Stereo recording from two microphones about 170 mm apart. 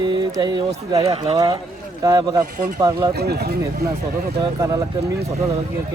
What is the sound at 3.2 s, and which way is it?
Speech, 70° right (ahead or behind).